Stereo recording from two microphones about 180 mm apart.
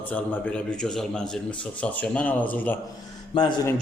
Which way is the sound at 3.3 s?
20° left (ahead or behind).